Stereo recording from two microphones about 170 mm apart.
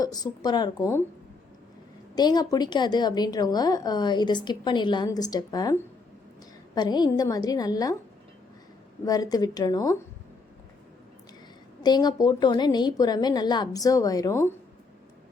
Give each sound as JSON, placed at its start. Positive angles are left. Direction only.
{"t": 0.0, "sound": "a woman's voice", "side_deg": 25}
{"t": 2.1, "sound": "a woman's voice", "side_deg": 25}
{"t": 6.7, "sound": "a woman's voice", "side_deg": 25}
{"t": 9.0, "sound": "a woman's voice", "side_deg": 20}
{"t": 11.8, "sound": "a woman's voice", "side_deg": 25}